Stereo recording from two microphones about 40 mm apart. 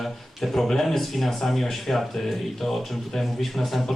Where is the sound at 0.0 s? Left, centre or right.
Centre.